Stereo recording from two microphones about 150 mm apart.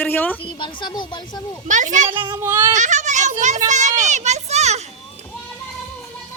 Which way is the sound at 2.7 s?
55° right (ahead or behind).